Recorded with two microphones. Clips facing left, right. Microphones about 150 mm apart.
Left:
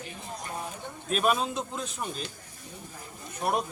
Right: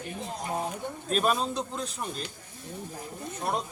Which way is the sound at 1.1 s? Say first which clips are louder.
Even; 5° left (ahead or behind).